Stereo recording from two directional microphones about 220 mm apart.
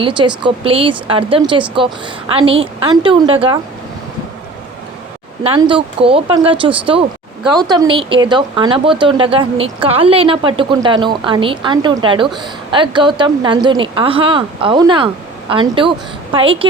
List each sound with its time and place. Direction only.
0.0 s speech: 20° right (ahead or behind)
5.4 s speech: 25° right (ahead or behind)